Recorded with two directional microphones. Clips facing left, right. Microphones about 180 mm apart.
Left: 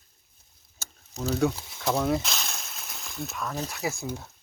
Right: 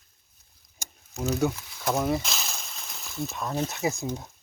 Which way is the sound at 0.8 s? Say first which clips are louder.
Right 1 dB; 15° right (ahead or behind).